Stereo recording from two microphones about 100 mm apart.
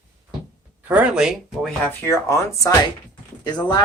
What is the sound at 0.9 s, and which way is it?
Speech, 10° right (ahead or behind).